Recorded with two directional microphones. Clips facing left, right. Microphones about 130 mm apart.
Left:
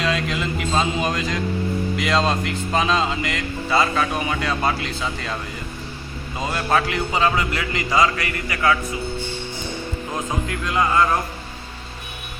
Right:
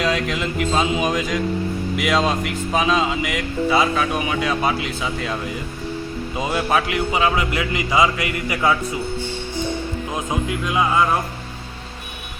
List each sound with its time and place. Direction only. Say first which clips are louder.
0.0 s music: right 2 dB; 5° right (ahead or behind)
2.0 s speech: right 2 dB; 5° right (ahead or behind)
10.2 s speech: right 2 dB; 20° right (ahead or behind)